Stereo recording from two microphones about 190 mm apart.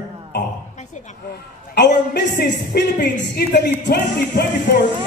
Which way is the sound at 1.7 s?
60° left (ahead or behind).